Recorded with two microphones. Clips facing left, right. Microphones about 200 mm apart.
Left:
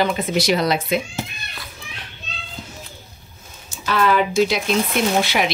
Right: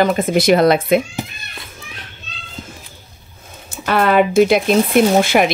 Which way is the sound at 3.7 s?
60° right (ahead or behind).